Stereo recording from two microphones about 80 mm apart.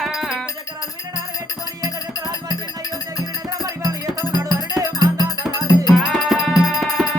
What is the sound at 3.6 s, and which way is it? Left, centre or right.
Music, right.